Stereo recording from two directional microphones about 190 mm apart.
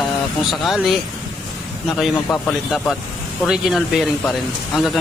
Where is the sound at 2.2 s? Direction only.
5° left (ahead or behind).